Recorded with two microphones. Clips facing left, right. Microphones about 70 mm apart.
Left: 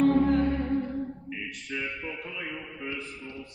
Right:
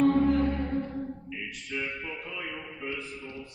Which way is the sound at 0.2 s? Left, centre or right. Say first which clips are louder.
Left 1 dB; left.